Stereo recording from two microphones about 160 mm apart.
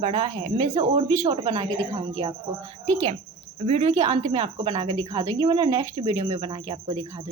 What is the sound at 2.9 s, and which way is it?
A child's voice, 40° right (ahead or behind).